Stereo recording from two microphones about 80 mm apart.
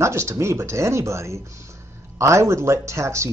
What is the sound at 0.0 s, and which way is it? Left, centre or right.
Speech, right.